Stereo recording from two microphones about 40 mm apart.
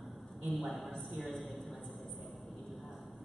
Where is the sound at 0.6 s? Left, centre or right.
Centre.